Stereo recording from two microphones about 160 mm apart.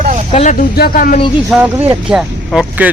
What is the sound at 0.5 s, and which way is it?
Speech, 70° left (ahead or behind).